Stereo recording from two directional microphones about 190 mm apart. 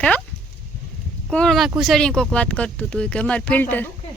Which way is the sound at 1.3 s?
5° left (ahead or behind).